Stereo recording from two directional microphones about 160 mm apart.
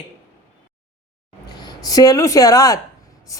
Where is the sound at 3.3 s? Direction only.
20° left (ahead or behind).